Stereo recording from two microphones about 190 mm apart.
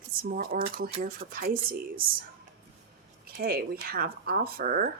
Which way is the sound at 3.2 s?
50° right (ahead or behind).